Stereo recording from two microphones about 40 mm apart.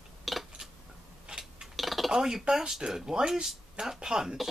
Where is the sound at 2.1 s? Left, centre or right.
Centre.